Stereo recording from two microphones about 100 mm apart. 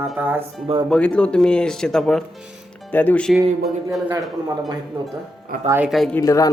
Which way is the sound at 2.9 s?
15° left (ahead or behind).